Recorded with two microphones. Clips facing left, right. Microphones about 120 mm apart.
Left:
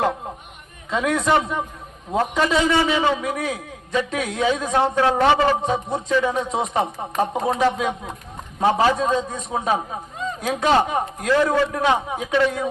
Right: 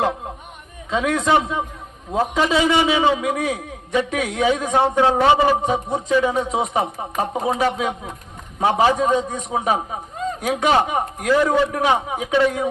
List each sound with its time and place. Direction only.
0.9 s a man's voice: centre (ahead or behind)
2.6 s a man's voice: 15° right (ahead or behind)